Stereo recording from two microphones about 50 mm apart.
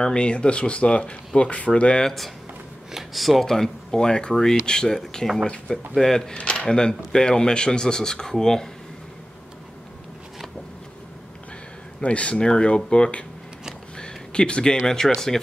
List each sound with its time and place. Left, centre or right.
0.0 s speech: centre
2.0 s speech: centre
6.3 s speech: left
12.0 s speech: left; by 15.4 s centre